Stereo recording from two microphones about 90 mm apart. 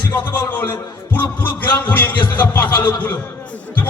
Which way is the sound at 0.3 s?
25° left (ahead or behind).